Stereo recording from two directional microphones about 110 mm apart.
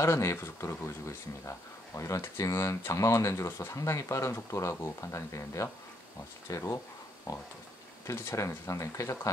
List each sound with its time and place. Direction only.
0.0 s speech: 25° left (ahead or behind)
8.1 s speech: 25° left (ahead or behind)